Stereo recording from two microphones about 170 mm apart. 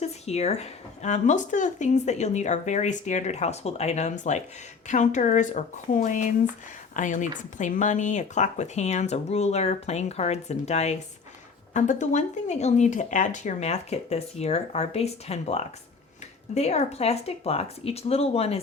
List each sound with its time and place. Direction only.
0.0 s speech: 40° left (ahead or behind)